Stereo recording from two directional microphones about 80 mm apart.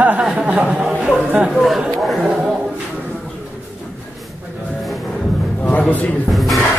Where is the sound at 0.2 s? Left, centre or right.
Centre.